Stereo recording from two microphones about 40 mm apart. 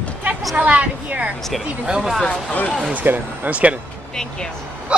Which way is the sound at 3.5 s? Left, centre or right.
Right.